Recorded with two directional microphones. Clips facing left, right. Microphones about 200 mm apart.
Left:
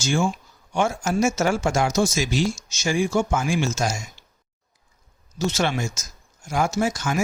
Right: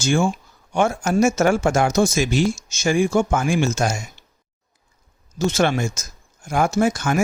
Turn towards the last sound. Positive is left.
turn(degrees=-60)  # may be behind; listen again after turning